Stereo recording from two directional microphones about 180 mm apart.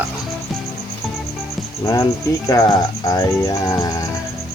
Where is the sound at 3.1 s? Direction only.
20° left (ahead or behind).